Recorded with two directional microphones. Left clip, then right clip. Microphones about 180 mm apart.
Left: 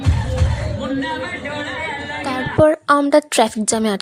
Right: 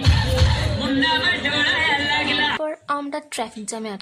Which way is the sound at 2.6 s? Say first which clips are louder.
Left 12 dB; 40° left (ahead or behind).